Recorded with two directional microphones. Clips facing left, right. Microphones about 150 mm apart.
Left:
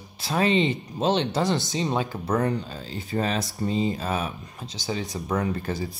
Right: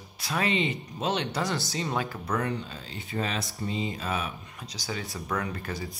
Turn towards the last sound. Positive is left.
turn(degrees=30)  # may be behind; listen again after turning